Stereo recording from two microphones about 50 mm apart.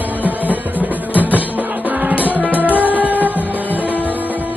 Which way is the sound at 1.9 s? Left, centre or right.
Right.